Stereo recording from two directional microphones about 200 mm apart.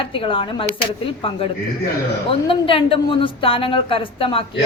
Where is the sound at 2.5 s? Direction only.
25° left (ahead or behind).